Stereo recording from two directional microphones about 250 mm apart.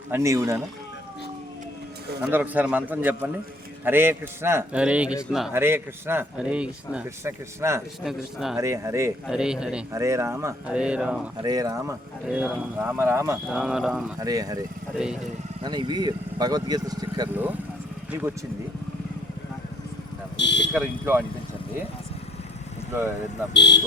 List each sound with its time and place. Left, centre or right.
0.1 s a man's voice: centre
2.2 s a man's voice: centre
8.5 s a man's voice: centre
14.2 s a man's voice: centre
14.9 s a man's voice: centre
15.6 s a man's voice: centre
20.3 s a sound: left
21.0 s a man's voice: centre
23.6 s speech: left